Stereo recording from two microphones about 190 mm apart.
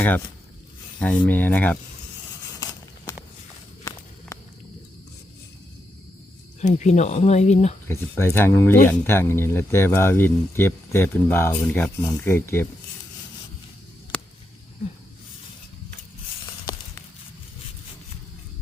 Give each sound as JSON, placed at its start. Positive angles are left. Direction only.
{"t": 0.9, "sound": "speech", "side_deg": 5}
{"t": 3.1, "sound": "walk", "side_deg": 20}
{"t": 6.6, "sound": "speech", "side_deg": 40}
{"t": 7.9, "sound": "speech", "side_deg": 10}